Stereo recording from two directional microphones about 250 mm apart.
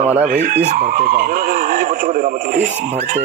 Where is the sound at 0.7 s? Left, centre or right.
Right.